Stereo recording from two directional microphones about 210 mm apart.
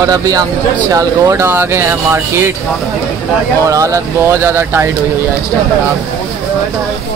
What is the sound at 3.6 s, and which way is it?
Speech, 15° right (ahead or behind).